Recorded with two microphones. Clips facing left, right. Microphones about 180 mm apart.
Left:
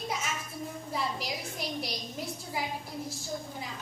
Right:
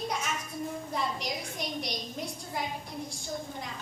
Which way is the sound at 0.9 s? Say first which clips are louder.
Left 1 dB; 5° left (ahead or behind).